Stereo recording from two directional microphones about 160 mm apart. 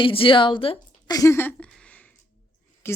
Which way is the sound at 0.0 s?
35° left (ahead or behind).